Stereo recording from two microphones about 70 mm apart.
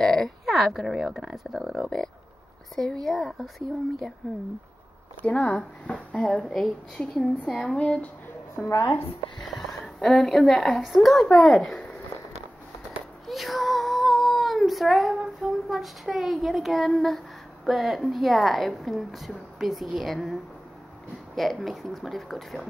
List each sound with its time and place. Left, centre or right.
0.0 s a woman's voice: centre
5.2 s speech: left
7.8 s speech: centre
9.4 s speech: centre
10.8 s a woman's voice: centre
12.9 s cat: centre
15.7 s a woman's voice: centre
21.4 s a woman's voice: centre